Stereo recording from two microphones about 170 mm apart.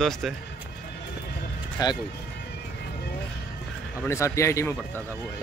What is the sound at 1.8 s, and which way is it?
Speech, 25° left (ahead or behind).